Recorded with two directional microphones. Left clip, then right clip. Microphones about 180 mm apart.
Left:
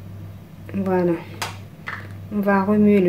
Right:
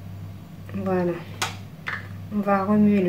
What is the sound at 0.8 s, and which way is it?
Speech, 50° left (ahead or behind).